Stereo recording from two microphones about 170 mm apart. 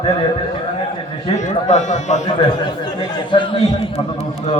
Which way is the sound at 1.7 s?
45° left (ahead or behind).